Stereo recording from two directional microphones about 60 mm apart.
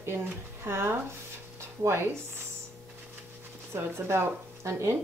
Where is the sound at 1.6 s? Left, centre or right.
Right.